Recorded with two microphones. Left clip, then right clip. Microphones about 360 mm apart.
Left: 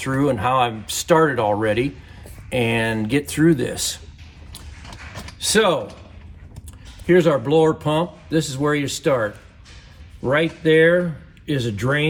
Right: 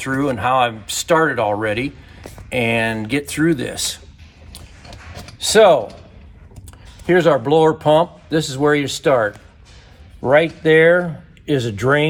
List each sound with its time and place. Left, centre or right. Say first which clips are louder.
0.0 s speech: right 1 dB; centre
5.4 s speech: right 7 dB; centre
7.1 s speech: right 2 dB; centre